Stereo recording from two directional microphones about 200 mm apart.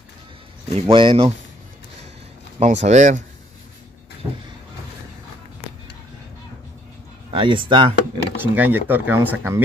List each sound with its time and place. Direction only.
0.7 s speech: 30° right (ahead or behind)
2.6 s speech: 35° right (ahead or behind)
7.3 s speech: 25° right (ahead or behind)
8.4 s speech: 10° right (ahead or behind)